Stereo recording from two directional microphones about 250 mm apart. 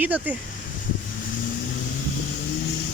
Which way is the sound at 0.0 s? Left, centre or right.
Centre.